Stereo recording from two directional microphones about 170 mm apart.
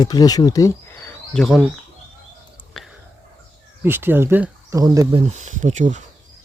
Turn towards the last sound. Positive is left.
turn(degrees=-45)  # may be behind; listen again after turning